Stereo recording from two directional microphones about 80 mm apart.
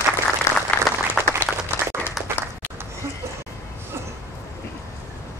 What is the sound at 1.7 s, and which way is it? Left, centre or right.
Applause, left.